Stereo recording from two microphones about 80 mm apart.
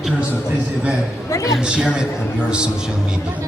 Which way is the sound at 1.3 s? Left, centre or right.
Left.